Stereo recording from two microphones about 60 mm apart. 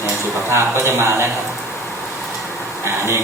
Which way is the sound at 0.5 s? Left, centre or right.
Right.